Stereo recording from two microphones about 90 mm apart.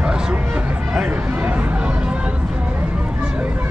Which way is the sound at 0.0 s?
10° right (ahead or behind).